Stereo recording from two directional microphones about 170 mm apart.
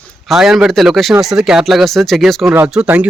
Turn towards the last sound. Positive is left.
turn(degrees=-5)  # may be behind; listen again after turning